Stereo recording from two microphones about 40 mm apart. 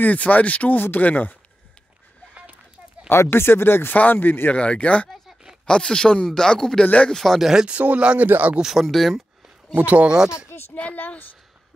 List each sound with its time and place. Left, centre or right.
0.0 s speech: left
3.1 s speech: left
3.9 s speech: left
4.6 s speech: left
5.7 s speech: centre
7.3 s speech: centre
7.6 s speech: right
8.3 s speech: right
8.6 s speech: centre
9.8 s speech: right
10.0 s speech: centre
11.0 s speech: left